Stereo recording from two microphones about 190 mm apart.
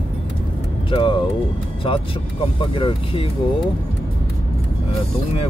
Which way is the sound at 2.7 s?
30° left (ahead or behind).